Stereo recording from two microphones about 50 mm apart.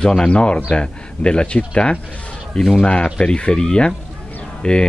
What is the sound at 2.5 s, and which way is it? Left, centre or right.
Speech, centre.